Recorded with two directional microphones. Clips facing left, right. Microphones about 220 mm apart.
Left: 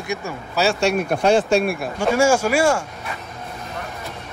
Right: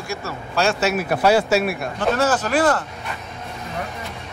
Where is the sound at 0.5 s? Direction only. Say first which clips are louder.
Left 1 dB; centre (ahead or behind).